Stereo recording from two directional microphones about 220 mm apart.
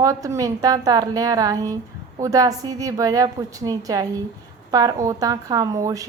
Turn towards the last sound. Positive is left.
turn(degrees=-15)  # may be behind; listen again after turning